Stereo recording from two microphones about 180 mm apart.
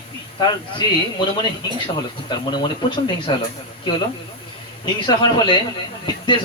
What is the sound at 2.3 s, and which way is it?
Speech, 25° left (ahead or behind).